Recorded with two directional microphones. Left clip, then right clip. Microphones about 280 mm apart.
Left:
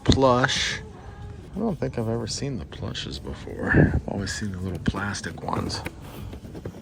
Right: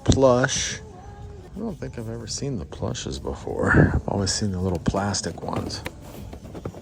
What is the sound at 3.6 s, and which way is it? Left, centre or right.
Speech, left.